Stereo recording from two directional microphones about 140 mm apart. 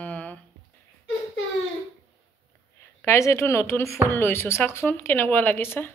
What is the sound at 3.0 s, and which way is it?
Speech, 20° left (ahead or behind).